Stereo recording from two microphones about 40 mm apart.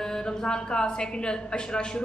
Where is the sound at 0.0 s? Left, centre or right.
Centre.